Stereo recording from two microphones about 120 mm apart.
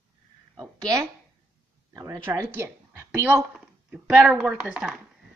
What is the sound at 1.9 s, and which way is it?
Speech, 30° right (ahead or behind).